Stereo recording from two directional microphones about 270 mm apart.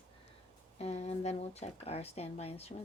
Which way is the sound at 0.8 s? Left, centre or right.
Left.